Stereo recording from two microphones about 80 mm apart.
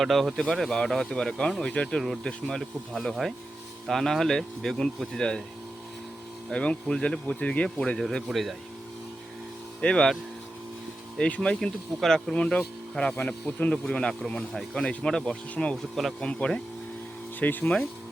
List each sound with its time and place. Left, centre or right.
0.0 s speech: centre
6.5 s speech: centre
9.8 s speech: centre
11.2 s speech: centre